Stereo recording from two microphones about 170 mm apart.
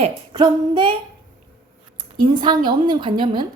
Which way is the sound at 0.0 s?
25° right (ahead or behind).